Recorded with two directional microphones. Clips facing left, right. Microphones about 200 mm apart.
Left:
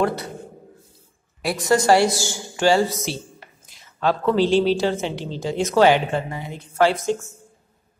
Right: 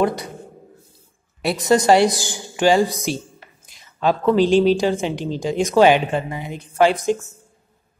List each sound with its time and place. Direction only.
0.0 s a woman's voice: 15° right (ahead or behind)
1.4 s a woman's voice: 20° right (ahead or behind)